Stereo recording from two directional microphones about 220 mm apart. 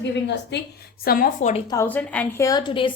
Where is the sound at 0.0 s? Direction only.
50° left (ahead or behind); by 1.6 s 35° left (ahead or behind).